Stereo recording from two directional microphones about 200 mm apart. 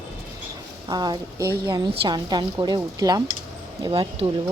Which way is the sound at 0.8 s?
20° right (ahead or behind).